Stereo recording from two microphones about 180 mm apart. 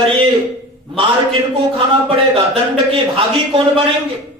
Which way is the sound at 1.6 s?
30° right (ahead or behind).